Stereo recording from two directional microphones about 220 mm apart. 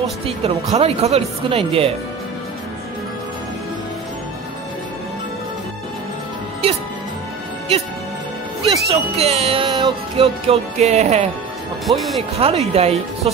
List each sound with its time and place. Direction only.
0.4 s speech: 30° right (ahead or behind)
6.6 s music: 25° right (ahead or behind)
8.6 s speech: 25° right (ahead or behind)
11.8 s speech: centre (ahead or behind)
12.4 s speech: 25° right (ahead or behind)